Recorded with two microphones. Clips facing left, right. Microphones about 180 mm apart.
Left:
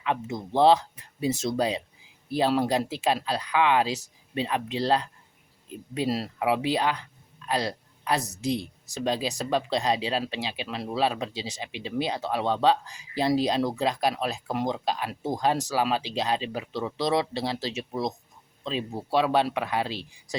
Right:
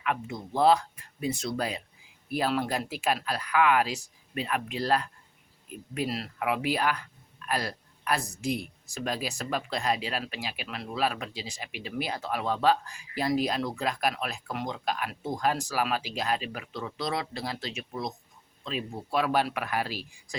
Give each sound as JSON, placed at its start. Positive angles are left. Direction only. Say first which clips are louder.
{"t": 0.0, "sound": "speech", "louder": "left 3 dB", "side_deg": 25}